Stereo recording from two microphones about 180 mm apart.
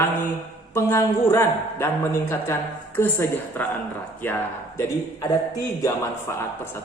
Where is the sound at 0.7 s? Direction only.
15° left (ahead or behind).